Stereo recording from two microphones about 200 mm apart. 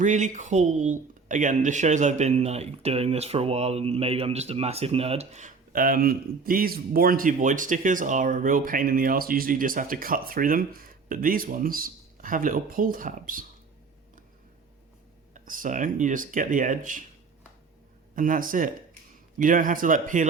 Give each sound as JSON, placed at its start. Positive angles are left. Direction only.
{"t": 0.0, "sound": "speech", "side_deg": -35}
{"t": 15.3, "sound": "speech", "side_deg": -40}
{"t": 18.1, "sound": "speech", "side_deg": -40}